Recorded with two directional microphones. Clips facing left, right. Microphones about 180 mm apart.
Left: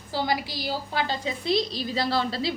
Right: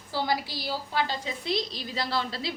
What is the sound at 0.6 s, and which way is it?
Speech, 15° left (ahead or behind).